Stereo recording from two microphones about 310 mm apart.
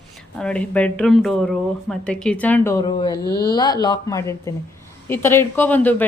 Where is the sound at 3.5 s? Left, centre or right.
Centre.